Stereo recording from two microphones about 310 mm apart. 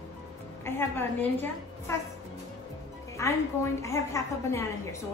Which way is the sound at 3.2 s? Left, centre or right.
Centre.